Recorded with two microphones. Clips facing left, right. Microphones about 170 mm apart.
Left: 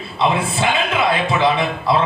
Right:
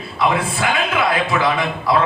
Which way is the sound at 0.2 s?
25° left (ahead or behind).